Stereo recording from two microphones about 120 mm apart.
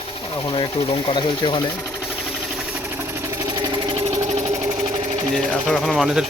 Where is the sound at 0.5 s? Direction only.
50° left (ahead or behind).